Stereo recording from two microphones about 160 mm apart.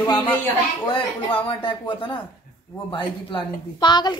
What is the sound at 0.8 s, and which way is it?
A woman's voice, 30° left (ahead or behind).